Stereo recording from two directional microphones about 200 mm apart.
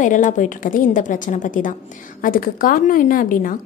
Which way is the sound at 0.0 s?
40° left (ahead or behind).